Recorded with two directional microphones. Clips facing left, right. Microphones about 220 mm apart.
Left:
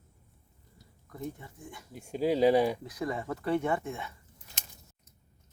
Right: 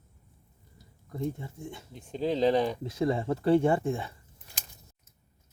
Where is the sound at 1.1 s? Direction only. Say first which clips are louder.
Right 6 dB; 25° right (ahead or behind).